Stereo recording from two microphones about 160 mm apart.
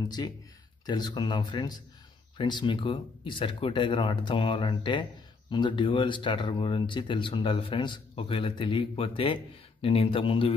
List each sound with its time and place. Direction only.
0.0 s speech: 25° left (ahead or behind)